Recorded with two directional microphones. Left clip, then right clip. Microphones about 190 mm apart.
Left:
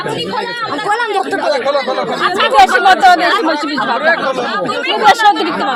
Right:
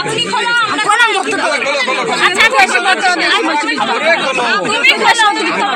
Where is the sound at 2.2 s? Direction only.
40° left (ahead or behind).